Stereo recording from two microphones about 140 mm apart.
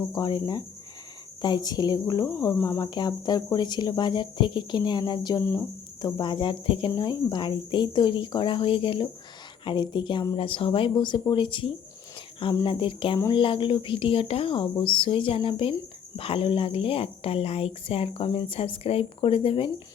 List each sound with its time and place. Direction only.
0.1 s speech: 30° left (ahead or behind)
5.4 s speech: 20° left (ahead or behind)
6.0 s speech: 30° left (ahead or behind)